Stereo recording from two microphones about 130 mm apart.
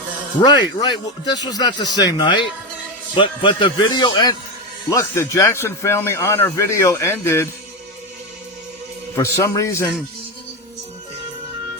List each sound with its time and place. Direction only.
0.3 s speech: 35° left (ahead or behind)
4.9 s speech: 25° left (ahead or behind)
9.1 s speech: 25° left (ahead or behind)